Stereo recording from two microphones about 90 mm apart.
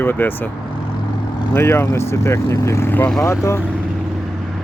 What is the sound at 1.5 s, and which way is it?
Speech, 30° left (ahead or behind).